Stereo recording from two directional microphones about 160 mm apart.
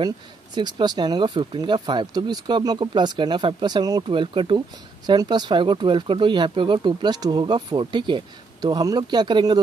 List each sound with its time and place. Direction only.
0.6 s speech: 30° right (ahead or behind)